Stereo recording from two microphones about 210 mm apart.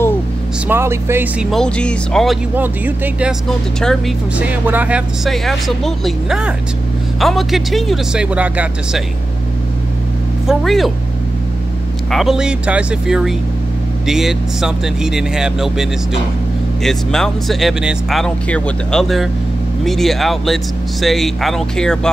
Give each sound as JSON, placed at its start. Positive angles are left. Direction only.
{"t": 0.7, "sound": "speech", "side_deg": -10}
{"t": 2.5, "sound": "speech", "side_deg": -10}
{"t": 10.5, "sound": "speech", "side_deg": 0}
{"t": 12.1, "sound": "speech", "side_deg": 0}